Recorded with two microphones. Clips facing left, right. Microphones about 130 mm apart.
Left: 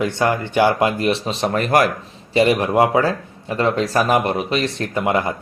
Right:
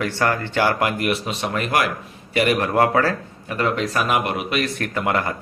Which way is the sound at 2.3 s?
25° left (ahead or behind).